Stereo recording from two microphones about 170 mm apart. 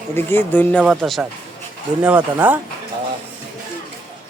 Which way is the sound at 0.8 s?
Centre (ahead or behind).